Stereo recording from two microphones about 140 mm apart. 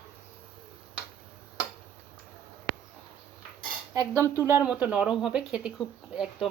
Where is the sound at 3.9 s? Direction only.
25° right (ahead or behind).